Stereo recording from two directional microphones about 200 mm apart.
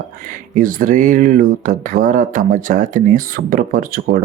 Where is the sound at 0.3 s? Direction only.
45° right (ahead or behind).